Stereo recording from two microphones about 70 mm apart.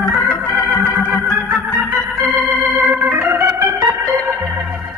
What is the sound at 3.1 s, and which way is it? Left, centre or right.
Organ, right.